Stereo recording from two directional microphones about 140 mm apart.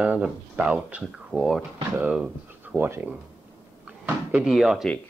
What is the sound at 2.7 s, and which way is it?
Speech, 15° right (ahead or behind).